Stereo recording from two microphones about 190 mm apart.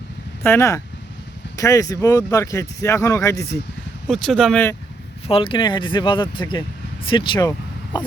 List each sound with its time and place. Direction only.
0.4 s speech: 15° left (ahead or behind)
4.1 s speech: centre (ahead or behind)
5.3 s speech: 25° left (ahead or behind)